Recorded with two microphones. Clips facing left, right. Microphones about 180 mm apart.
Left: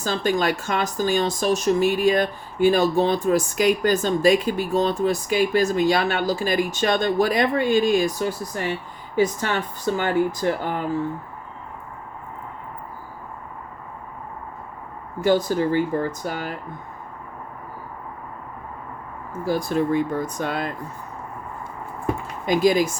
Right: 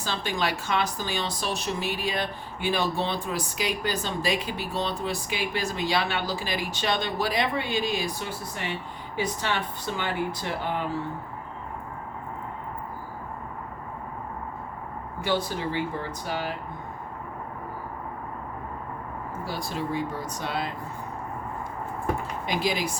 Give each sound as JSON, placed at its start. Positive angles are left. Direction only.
{"t": 0.0, "sound": "speech", "side_deg": 45}
{"t": 15.2, "sound": "speech", "side_deg": 45}
{"t": 19.5, "sound": "speech", "side_deg": 50}
{"t": 22.4, "sound": "speech", "side_deg": 45}